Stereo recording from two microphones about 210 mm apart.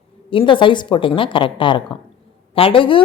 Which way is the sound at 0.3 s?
25° left (ahead or behind).